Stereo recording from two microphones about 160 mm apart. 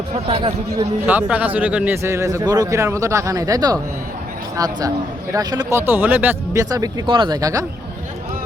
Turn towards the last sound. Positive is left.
turn(degrees=-20)  # may be behind; listen again after turning